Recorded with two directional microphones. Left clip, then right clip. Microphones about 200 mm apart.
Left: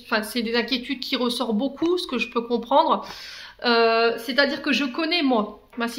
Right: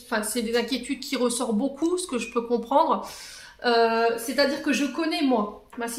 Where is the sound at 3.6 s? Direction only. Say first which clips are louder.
Left 2 dB; 30° left (ahead or behind).